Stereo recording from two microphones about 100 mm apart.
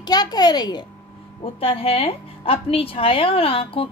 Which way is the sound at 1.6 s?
70° left (ahead or behind).